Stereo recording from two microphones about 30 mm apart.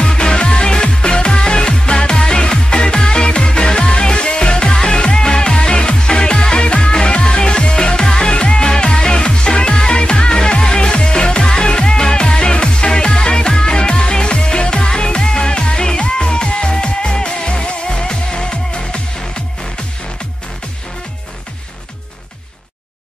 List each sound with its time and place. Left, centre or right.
0.0 s music: left